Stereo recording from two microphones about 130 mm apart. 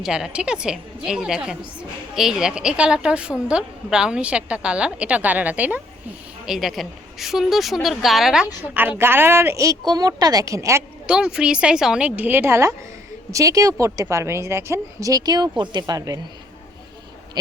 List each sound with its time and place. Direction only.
0.0 s a woman's voice: 5° right (ahead or behind)
8.6 s a woman's voice: 15° right (ahead or behind)
11.0 s a woman's voice: 5° right (ahead or behind); by 16.2 s 30° right (ahead or behind)